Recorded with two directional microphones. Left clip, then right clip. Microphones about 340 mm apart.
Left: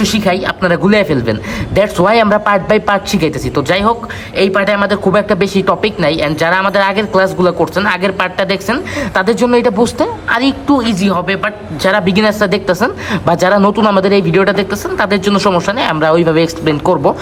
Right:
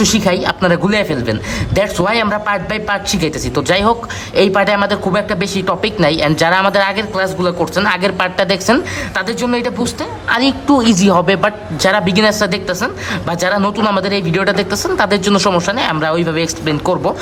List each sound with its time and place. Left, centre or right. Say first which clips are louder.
0.0 s speech: even; centre